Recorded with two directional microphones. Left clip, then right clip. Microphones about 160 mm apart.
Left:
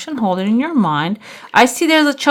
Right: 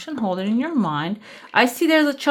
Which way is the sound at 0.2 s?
25° left (ahead or behind).